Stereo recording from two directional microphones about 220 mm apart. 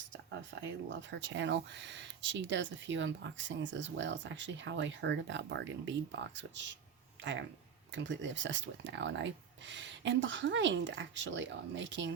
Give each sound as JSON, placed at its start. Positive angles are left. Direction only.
{"t": 0.9, "sound": "speech", "side_deg": -55}